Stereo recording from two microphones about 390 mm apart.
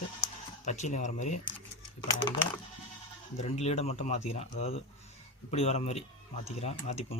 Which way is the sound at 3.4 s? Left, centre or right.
Centre.